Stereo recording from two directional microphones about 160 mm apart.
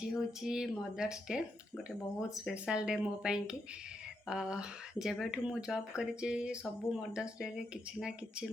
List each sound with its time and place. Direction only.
0.0 s speech: 5° right (ahead or behind)